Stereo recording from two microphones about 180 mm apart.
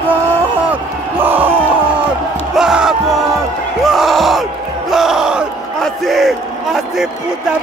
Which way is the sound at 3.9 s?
Centre (ahead or behind).